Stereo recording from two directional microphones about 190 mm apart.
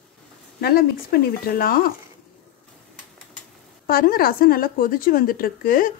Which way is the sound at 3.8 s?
50° left (ahead or behind).